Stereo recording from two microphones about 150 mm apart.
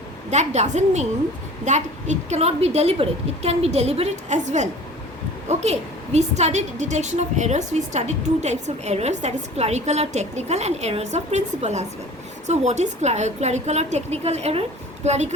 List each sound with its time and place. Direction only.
0.3 s a woman's voice: 50° right (ahead or behind)